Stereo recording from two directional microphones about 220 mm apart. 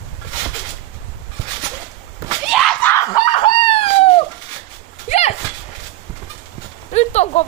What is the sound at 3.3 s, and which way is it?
Dog, 25° left (ahead or behind).